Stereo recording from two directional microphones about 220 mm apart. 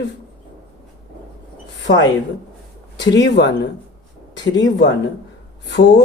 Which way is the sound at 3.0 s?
50° left (ahead or behind).